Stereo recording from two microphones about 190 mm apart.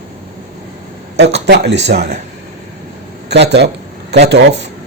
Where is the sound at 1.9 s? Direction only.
40° right (ahead or behind).